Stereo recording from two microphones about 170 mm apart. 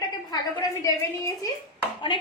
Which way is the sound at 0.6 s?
20° left (ahead or behind).